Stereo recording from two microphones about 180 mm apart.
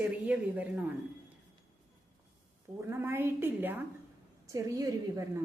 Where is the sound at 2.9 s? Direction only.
15° right (ahead or behind).